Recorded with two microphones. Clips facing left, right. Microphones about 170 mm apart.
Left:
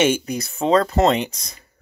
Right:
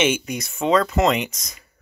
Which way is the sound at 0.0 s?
35° left (ahead or behind).